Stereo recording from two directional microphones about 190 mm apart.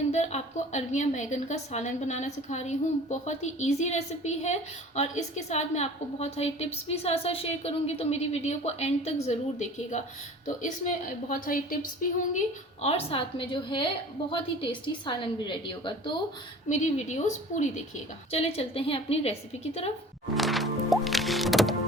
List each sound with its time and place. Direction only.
0.1 s a woman's voice: 35° left (ahead or behind)
12.8 s a woman's voice: 30° left (ahead or behind)
16.6 s a woman's voice: 40° left (ahead or behind)
20.3 s music: centre (ahead or behind)